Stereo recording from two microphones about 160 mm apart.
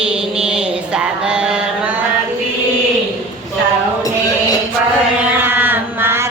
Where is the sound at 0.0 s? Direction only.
5° right (ahead or behind).